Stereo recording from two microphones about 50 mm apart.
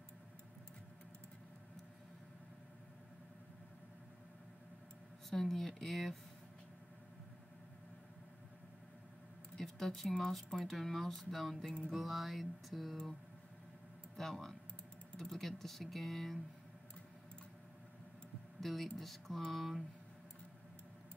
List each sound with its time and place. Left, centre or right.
5.3 s speech: centre
9.6 s speech: centre
14.1 s speech: centre
18.6 s speech: centre